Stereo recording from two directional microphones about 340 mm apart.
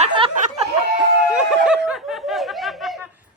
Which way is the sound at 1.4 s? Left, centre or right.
Centre.